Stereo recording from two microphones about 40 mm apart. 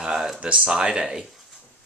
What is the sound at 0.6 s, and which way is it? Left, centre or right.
Speech, right.